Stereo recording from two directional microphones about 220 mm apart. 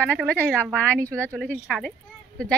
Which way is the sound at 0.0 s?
5° left (ahead or behind).